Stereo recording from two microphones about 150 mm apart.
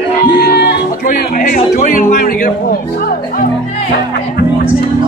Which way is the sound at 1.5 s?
55° left (ahead or behind).